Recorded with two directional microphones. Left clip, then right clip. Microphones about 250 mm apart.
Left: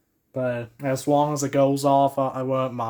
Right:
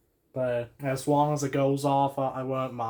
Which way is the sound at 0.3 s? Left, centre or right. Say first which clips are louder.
Left 2 dB; left.